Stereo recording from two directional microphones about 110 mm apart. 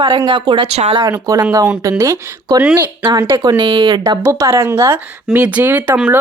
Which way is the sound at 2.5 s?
15° right (ahead or behind).